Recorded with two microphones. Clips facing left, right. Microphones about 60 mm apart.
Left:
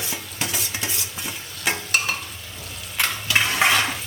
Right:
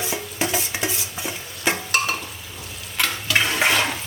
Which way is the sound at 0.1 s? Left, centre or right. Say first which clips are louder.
Right 5 dB; centre.